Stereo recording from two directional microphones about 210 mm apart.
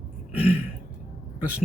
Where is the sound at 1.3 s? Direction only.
5° right (ahead or behind).